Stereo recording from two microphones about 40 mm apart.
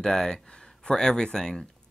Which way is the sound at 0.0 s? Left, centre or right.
Centre.